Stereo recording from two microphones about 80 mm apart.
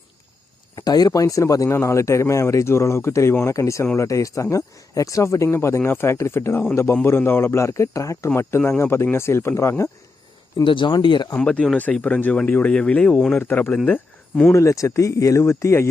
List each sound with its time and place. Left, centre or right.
0.8 s speech: left
10.6 s speech: left
11.3 s speech: centre
14.5 s speech: left